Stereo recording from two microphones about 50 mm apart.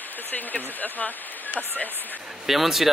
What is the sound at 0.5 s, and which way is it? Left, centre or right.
Speech, left.